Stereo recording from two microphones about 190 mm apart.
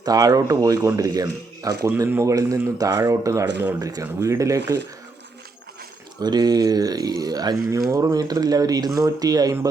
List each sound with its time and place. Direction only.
0.0 s speech: 20° right (ahead or behind)
6.1 s speech: 20° right (ahead or behind)